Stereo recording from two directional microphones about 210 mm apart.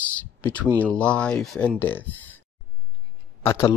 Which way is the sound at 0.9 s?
5° left (ahead or behind).